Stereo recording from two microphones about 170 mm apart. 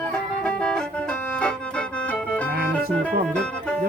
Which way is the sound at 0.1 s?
5° left (ahead or behind).